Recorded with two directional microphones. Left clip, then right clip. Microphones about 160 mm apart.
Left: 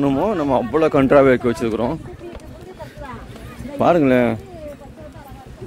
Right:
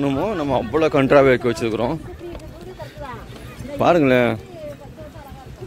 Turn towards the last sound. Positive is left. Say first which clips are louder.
# even
turn(degrees=10)  # may be behind; listen again after turning